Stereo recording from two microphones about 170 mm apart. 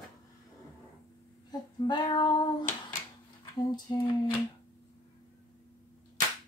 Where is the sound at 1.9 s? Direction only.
30° left (ahead or behind).